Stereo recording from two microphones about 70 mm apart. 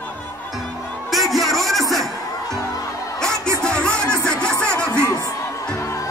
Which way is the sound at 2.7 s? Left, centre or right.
Left.